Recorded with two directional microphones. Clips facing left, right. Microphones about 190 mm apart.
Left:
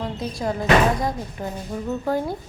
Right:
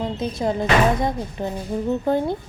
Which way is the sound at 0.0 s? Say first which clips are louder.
Right 3 dB; 20° right (ahead or behind).